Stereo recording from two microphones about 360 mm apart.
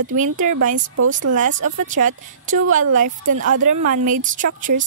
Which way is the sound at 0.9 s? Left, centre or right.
Right.